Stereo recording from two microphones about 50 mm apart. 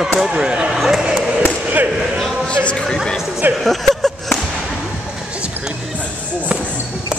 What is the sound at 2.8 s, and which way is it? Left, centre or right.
Speech, centre.